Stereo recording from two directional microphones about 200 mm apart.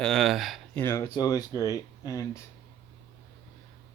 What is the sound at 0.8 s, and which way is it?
Speech, 20° left (ahead or behind).